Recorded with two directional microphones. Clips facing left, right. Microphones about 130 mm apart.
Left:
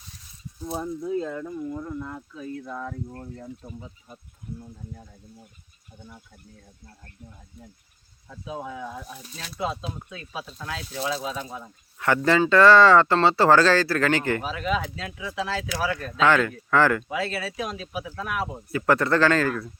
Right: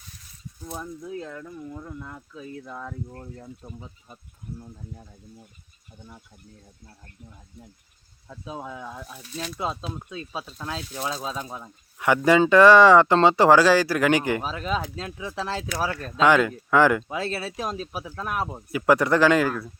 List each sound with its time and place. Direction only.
0.7 s speech: 30° left (ahead or behind)
10.1 s speech: 30° right (ahead or behind)
11.9 s speech: 15° right (ahead or behind)
14.4 s speech: 35° right (ahead or behind)
16.2 s speech: 15° right (ahead or behind)
17.0 s speech: 30° right (ahead or behind)
18.7 s speech: 15° right (ahead or behind)